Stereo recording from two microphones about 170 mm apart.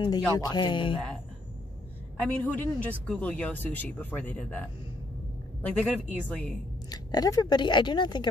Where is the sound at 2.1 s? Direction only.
10° left (ahead or behind).